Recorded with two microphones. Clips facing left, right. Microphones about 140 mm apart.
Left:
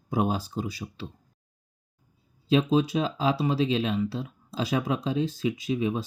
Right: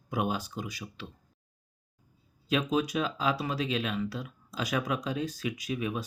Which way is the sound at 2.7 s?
30° left (ahead or behind).